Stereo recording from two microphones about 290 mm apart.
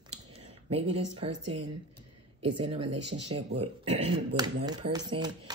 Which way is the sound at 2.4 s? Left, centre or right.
Centre.